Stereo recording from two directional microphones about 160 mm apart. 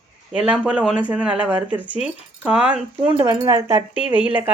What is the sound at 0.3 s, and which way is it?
Speech, 5° right (ahead or behind).